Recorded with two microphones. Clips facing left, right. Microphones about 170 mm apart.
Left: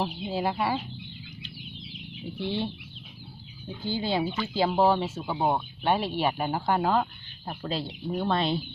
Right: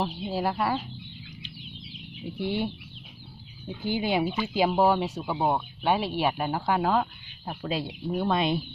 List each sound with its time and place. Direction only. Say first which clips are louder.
0.0 s speech: even; 5° right (ahead or behind)
2.4 s speech: right 2 dB; 15° right (ahead or behind)
3.8 s speech: right 2 dB; 15° right (ahead or behind)
4.7 s speech: even; 5° right (ahead or behind)
7.7 s speech: right 2 dB; 10° right (ahead or behind)